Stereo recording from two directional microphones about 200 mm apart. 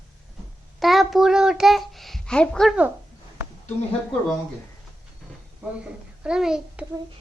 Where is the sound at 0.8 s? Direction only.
Centre (ahead or behind).